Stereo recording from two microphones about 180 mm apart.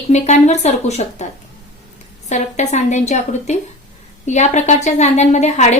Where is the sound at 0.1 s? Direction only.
40° left (ahead or behind).